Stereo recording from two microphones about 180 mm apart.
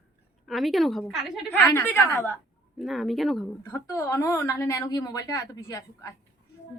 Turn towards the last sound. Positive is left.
turn(degrees=20)  # may be behind; listen again after turning